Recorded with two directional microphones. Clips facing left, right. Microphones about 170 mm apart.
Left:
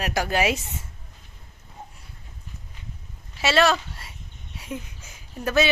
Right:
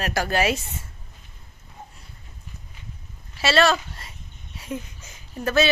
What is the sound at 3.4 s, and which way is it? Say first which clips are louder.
A woman's voice: right 1 dB; 15° left (ahead or behind).